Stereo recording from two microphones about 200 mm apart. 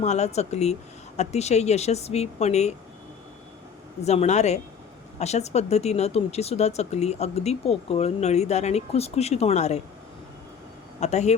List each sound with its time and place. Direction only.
0.0 s speech: 35° left (ahead or behind)
4.0 s speech: 35° left (ahead or behind)
11.0 s speech: 35° left (ahead or behind)